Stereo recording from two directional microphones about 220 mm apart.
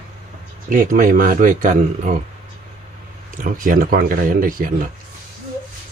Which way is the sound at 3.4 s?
40° right (ahead or behind).